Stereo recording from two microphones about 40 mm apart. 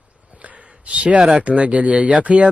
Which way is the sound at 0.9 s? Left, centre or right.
Right.